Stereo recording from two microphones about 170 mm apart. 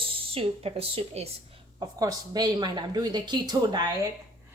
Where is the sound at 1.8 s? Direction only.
20° right (ahead or behind).